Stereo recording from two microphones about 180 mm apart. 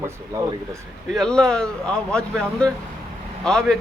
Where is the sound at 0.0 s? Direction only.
15° right (ahead or behind).